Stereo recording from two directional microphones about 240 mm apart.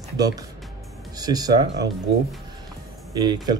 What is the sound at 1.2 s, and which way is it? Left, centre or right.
Speech, centre.